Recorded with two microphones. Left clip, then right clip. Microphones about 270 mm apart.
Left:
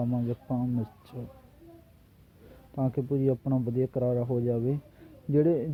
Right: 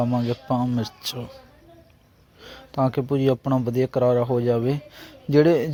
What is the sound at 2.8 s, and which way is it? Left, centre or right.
Speech, centre.